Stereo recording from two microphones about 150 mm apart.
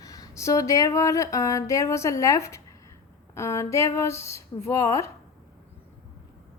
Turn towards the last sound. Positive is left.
turn(degrees=20)  # may be behind; listen again after turning